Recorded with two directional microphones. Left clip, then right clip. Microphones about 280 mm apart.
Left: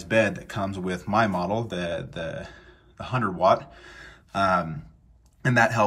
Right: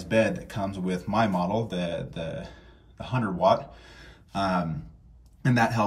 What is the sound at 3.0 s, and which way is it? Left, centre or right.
Speech, centre.